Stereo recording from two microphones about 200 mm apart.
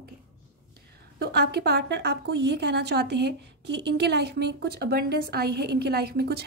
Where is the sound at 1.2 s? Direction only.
55° right (ahead or behind).